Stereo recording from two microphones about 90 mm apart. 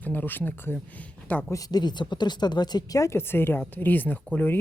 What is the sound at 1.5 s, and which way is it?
Speech, 40° left (ahead or behind).